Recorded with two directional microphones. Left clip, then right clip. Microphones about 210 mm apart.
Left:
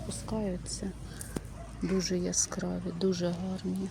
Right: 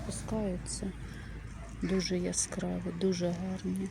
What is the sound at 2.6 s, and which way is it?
Speech, centre (ahead or behind).